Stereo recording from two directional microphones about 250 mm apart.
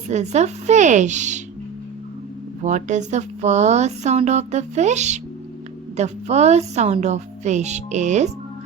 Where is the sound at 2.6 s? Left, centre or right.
Right.